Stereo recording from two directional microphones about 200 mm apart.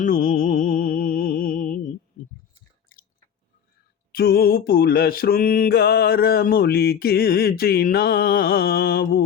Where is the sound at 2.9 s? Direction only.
45° left (ahead or behind).